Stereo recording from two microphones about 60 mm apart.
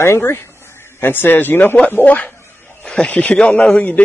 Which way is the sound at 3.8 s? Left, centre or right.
Left.